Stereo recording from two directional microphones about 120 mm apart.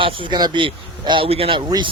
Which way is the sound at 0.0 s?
40° right (ahead or behind).